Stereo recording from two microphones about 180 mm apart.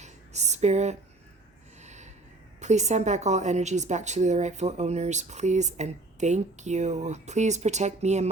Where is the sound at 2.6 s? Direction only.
40° right (ahead or behind).